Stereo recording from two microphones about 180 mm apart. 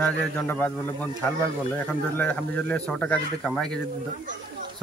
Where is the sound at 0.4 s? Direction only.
10° left (ahead or behind).